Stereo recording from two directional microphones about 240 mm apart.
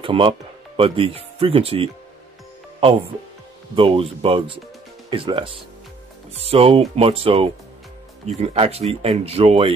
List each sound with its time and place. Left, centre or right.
0.0 s speech: right
3.7 s speech: right